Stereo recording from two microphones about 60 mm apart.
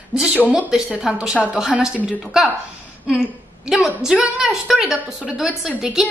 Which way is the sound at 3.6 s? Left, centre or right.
Centre.